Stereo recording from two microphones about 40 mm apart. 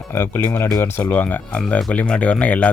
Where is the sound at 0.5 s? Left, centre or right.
Left.